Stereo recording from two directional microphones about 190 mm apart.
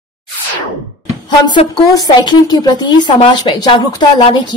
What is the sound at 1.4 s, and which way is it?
A woman's voice, 25° left (ahead or behind).